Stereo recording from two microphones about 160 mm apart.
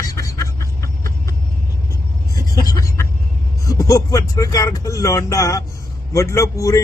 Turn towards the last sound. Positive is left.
turn(degrees=20)  # may be behind; listen again after turning